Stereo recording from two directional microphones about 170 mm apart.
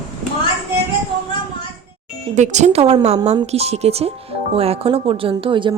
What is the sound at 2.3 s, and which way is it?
A woman's voice, 45° right (ahead or behind).